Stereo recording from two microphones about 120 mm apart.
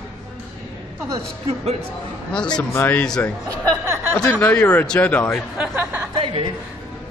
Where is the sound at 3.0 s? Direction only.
5° left (ahead or behind).